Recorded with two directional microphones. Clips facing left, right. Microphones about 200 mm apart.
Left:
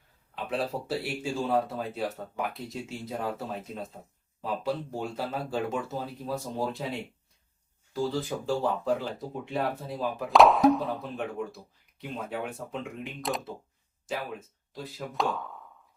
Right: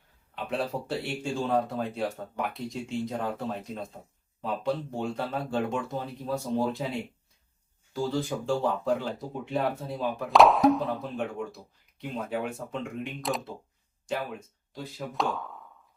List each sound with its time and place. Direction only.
0.3 s speech: centre (ahead or behind)
8.1 s speech: centre (ahead or behind)